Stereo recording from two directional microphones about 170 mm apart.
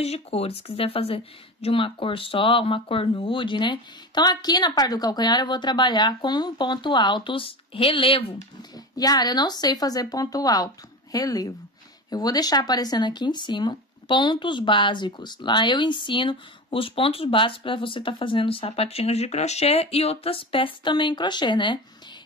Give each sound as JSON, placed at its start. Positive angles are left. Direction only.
{"t": 0.0, "sound": "speech", "side_deg": 40}
{"t": 8.9, "sound": "speech", "side_deg": 20}